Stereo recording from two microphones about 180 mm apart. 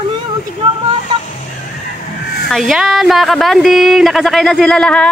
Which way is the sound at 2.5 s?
Centre (ahead or behind).